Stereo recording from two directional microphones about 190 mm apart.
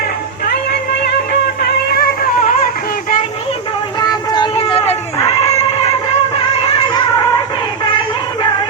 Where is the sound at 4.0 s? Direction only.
20° left (ahead or behind).